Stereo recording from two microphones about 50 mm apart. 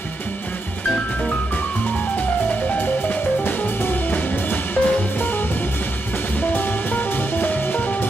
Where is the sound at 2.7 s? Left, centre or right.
Left.